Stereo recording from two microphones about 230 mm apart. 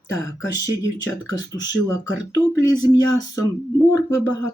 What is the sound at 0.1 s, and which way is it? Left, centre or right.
Speech, centre.